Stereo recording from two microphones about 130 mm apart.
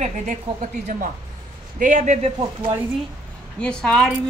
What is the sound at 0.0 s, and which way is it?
A woman's voice, 70° right (ahead or behind).